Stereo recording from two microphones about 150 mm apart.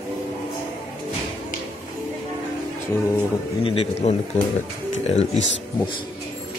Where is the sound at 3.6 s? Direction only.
40° left (ahead or behind).